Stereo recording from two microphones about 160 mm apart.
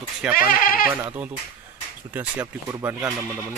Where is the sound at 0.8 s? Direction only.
10° right (ahead or behind).